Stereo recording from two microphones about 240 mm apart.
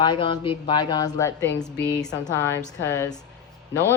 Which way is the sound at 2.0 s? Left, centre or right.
Centre.